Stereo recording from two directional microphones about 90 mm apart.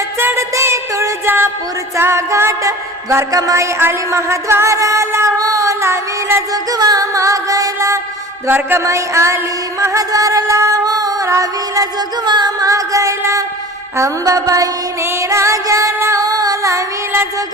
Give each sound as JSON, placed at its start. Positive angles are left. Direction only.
{"t": 0.2, "sound": "music", "side_deg": -30}
{"t": 6.5, "sound": "music", "side_deg": -45}
{"t": 8.4, "sound": "music", "side_deg": -25}
{"t": 12.2, "sound": "music", "side_deg": -55}